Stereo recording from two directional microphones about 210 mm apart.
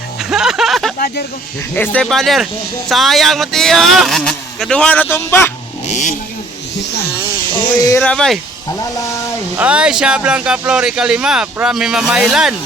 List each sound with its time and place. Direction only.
0.2 s music: 5° right (ahead or behind)
0.9 s speech: 45° left (ahead or behind)
1.7 s speech: 10° left (ahead or behind)
6.7 s speech: 50° left (ahead or behind)
7.8 s speech: 15° left (ahead or behind)
8.0 s speech: 5° left (ahead or behind)
9.6 s speech: 5° right (ahead or behind)